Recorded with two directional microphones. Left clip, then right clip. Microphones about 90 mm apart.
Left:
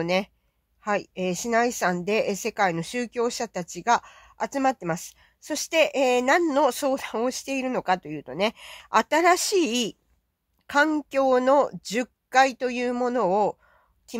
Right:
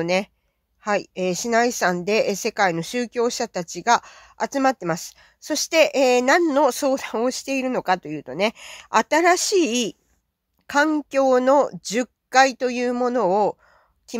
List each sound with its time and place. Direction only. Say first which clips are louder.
0.0 s a woman's voice: right 3 dB; 35° right (ahead or behind)